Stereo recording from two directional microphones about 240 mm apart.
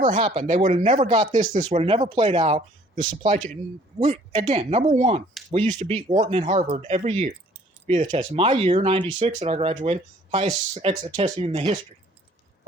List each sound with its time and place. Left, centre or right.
0.0 s speech: right